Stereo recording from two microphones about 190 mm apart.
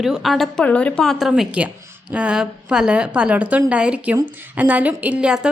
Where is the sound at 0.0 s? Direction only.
Centre (ahead or behind).